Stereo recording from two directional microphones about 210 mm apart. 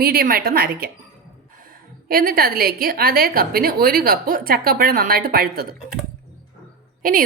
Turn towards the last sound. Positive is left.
turn(degrees=-40)  # may be behind; listen again after turning